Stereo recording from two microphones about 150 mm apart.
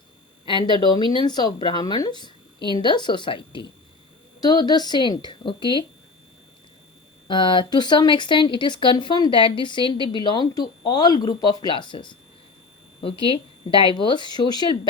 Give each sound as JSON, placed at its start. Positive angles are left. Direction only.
{"t": 0.4, "sound": "a woman's voice", "side_deg": 30}
{"t": 7.3, "sound": "speech", "side_deg": 30}